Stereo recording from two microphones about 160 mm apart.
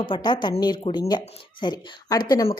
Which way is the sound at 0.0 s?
30° left (ahead or behind).